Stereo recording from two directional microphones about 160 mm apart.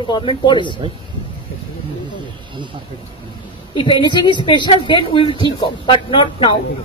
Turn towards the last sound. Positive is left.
turn(degrees=30)  # may be behind; listen again after turning